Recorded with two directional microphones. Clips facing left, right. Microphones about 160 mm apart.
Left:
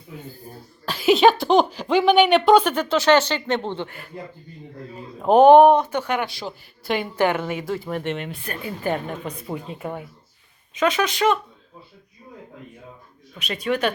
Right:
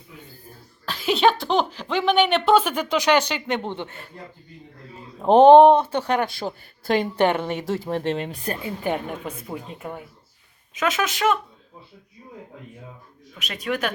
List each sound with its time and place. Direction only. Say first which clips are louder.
0.9 s speech: left 4 dB; 10° left (ahead or behind); by 3.8 s 10° right (ahead or behind)
4.1 s speech: left 6 dB; 15° left (ahead or behind)
5.3 s speech: even; 25° right (ahead or behind)
6.2 s speech: right 2 dB; 50° right (ahead or behind)
7.2 s speech: right 1 dB; 25° right (ahead or behind)
8.6 s a woman's voice: left 2 dB; 15° right (ahead or behind)
9.5 s speech: left 3 dB; centre (ahead or behind)
13.4 s speech: left 4 dB; centre (ahead or behind)